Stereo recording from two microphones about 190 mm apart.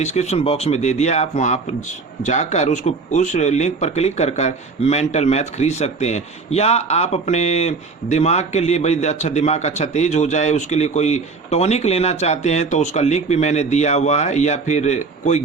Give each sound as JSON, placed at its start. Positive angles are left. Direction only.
{"t": 0.0, "sound": "speech", "side_deg": 35}